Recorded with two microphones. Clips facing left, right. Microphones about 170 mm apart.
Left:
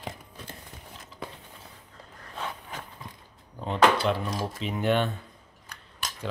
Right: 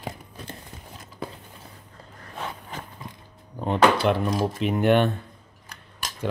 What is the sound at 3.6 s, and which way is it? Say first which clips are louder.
Speech: right 3 dB; 55° right (ahead or behind).